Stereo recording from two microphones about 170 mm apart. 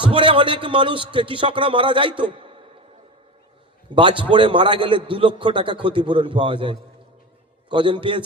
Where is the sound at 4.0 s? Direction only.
30° right (ahead or behind).